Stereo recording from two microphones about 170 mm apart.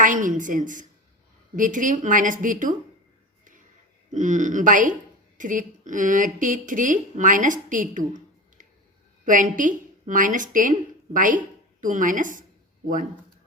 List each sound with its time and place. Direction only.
0.0 s a woman's voice: 50° right (ahead or behind)
4.1 s a woman's voice: 45° right (ahead or behind)